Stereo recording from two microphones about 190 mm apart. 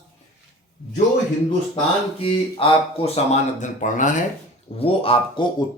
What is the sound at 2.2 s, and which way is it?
Speech, 30° left (ahead or behind).